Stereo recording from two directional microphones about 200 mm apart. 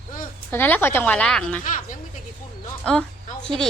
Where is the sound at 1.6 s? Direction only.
40° left (ahead or behind).